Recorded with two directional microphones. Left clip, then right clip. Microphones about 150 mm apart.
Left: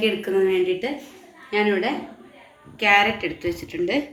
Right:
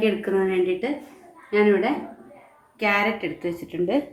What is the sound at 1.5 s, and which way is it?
A woman's voice, 90° right.